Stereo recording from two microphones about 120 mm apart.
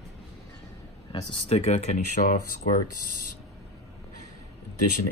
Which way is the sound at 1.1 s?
45° left (ahead or behind).